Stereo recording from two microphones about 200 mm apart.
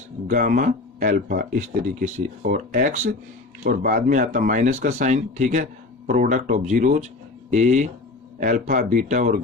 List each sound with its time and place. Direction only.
0.3 s speech: 40° right (ahead or behind)